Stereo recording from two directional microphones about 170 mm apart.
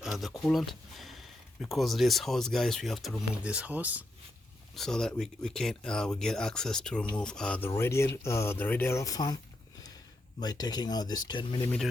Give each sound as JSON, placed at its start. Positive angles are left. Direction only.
{"t": 0.0, "sound": "speech", "side_deg": 0}
{"t": 4.7, "sound": "speech", "side_deg": 5}
{"t": 10.4, "sound": "speech", "side_deg": 25}